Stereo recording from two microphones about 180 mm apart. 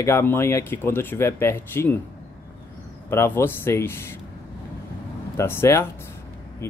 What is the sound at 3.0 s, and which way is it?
Speech, 10° left (ahead or behind).